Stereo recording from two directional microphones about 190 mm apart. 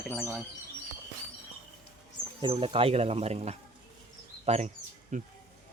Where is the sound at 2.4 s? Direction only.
30° right (ahead or behind).